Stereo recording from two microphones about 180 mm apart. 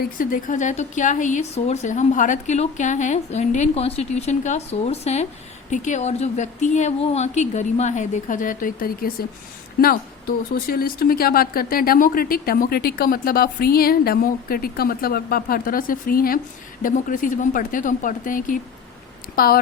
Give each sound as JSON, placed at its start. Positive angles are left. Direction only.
{"t": 0.0, "sound": "a woman's voice", "side_deg": 50}